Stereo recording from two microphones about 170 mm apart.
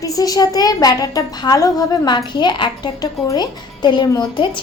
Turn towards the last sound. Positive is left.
turn(degrees=25)  # may be behind; listen again after turning